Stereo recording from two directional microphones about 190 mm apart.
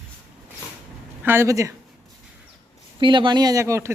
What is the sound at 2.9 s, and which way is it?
Speech, 25° right (ahead or behind).